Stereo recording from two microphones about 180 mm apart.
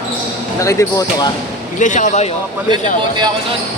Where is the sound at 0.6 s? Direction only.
15° left (ahead or behind).